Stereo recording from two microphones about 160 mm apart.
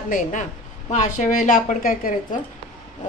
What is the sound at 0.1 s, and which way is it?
A woman's voice, 55° left (ahead or behind).